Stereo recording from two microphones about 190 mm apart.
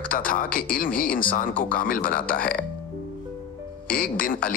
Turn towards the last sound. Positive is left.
turn(degrees=45)  # may be behind; listen again after turning